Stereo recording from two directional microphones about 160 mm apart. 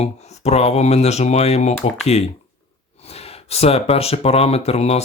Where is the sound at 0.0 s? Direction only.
40° left (ahead or behind).